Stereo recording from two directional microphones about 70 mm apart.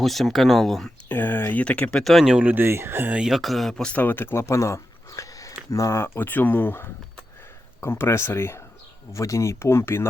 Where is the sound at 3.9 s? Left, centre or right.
Left.